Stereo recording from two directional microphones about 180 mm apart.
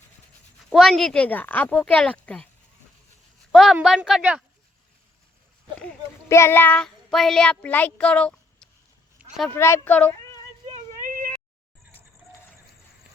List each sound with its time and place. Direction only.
0.7 s speech: centre (ahead or behind)
3.5 s a woman's voice: centre (ahead or behind)
5.8 s speech: 10° left (ahead or behind)
10.7 s a sound: 50° right (ahead or behind)